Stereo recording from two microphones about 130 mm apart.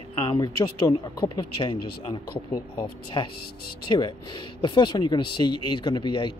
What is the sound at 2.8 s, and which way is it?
Speech, 40° left (ahead or behind).